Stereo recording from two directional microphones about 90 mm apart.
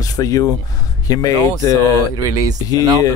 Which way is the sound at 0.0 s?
40° left (ahead or behind).